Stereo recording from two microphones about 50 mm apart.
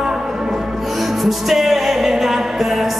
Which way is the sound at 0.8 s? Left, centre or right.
Centre.